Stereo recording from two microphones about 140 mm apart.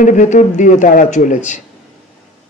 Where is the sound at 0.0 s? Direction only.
65° left (ahead or behind).